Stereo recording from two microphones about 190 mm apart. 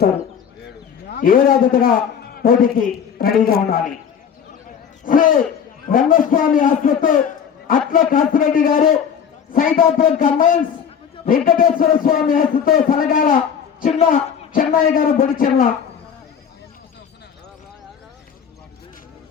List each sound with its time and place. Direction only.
1.1 s a man's voice: 50° left (ahead or behind)
5.0 s a man's voice: 45° left (ahead or behind)